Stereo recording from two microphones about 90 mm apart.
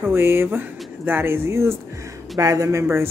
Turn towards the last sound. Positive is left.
turn(degrees=-30)  # may be behind; listen again after turning